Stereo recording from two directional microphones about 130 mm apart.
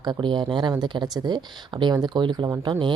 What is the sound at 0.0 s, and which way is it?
Speech, 35° right (ahead or behind).